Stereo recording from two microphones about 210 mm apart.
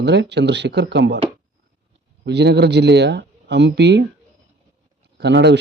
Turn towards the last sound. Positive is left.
turn(degrees=-55)  # may be behind; listen again after turning